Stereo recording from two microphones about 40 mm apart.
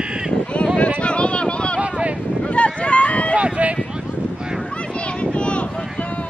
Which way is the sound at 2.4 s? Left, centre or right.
Left.